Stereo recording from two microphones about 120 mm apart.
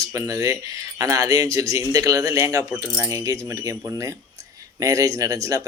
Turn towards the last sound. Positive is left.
turn(degrees=-25)  # may be behind; listen again after turning